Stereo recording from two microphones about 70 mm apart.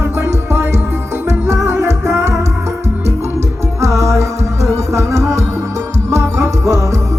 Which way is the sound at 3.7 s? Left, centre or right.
Right.